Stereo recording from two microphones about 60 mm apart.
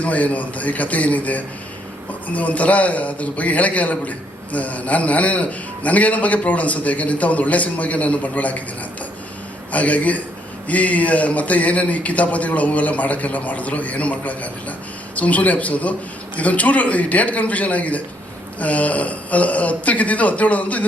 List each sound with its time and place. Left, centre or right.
0.0 s a man's voice: left
9.7 s a man's voice: left